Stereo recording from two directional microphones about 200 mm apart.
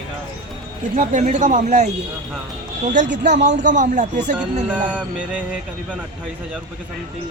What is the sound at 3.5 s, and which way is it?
Speech, 40° right (ahead or behind).